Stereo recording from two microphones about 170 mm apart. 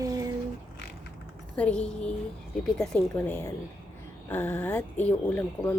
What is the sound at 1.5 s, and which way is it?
A woman's voice, 5° left (ahead or behind).